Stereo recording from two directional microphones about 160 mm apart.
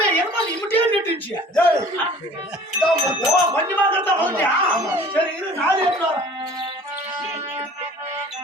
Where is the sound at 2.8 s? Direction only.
20° right (ahead or behind).